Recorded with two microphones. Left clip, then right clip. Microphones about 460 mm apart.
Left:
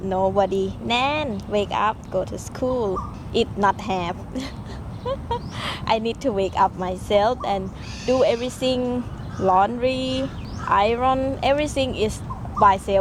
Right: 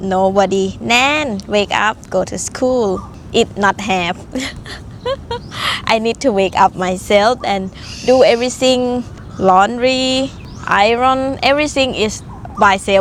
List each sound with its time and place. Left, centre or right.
0.1 s speech: right